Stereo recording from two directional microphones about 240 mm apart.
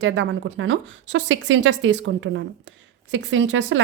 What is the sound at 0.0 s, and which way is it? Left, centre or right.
A woman's voice, right.